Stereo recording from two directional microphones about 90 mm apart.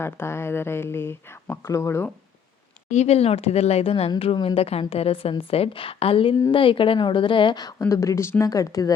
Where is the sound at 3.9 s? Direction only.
90° left.